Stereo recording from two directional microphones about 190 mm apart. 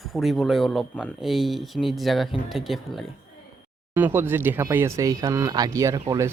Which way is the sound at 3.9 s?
10° right (ahead or behind).